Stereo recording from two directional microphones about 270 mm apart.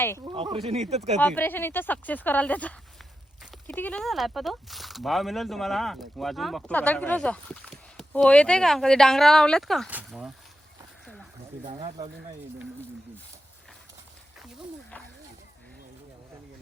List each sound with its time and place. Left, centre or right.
0.3 s speech: centre
1.2 s speech: centre
11.8 s speech: right